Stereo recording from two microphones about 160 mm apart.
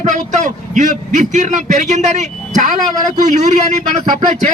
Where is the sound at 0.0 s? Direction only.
50° right (ahead or behind).